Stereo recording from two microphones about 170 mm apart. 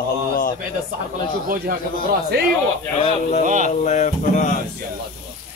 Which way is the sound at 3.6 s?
45° left (ahead or behind).